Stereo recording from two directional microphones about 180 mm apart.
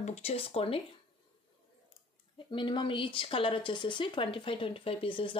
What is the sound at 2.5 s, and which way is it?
Speech, 25° left (ahead or behind).